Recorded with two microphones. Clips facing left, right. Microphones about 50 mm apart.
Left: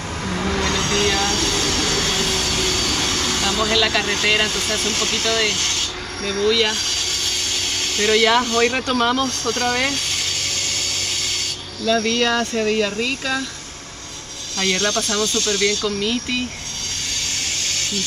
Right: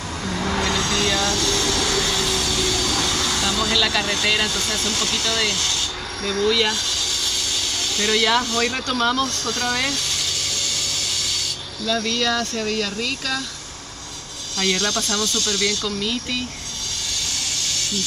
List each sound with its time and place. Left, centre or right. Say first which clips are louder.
0.2 s vehicle: left 1 dB; centre
0.7 s train: left 2 dB; left
3.7 s speech: left 2 dB; left
4.0 s speech: left 2 dB; left
6.4 s speech: left 2 dB; centre
6.7 s a sound: left 1 dB; left
8.5 s speech: left 4 dB; left
8.9 s speech: left 2 dB; left
9.4 s vehicle: left 3 dB; left
11.9 s speech: left 4 dB; left
14.6 s speech: left 2 dB; left
15.8 s speech: left 3 dB; left
17.6 s a sound: left 1 dB; left